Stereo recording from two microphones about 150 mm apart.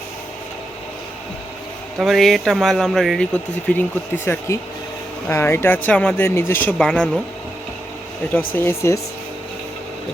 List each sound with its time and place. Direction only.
2.0 s speech: centre (ahead or behind)
8.3 s speech: 10° left (ahead or behind)